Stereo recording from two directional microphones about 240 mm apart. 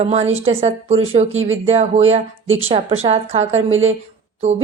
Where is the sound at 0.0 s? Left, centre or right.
Right.